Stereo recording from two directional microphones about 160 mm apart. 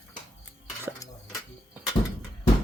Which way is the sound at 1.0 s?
20° left (ahead or behind).